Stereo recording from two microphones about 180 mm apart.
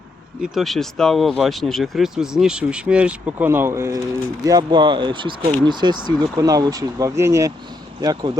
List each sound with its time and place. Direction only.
0.5 s speech: centre (ahead or behind); by 8.4 s 20° right (ahead or behind)